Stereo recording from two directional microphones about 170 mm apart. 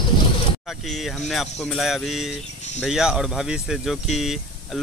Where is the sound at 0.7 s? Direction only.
Centre (ahead or behind).